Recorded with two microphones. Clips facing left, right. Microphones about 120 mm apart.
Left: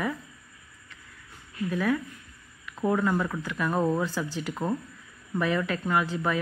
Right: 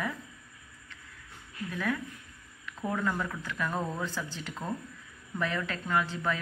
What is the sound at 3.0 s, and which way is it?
Speech, 20° left (ahead or behind).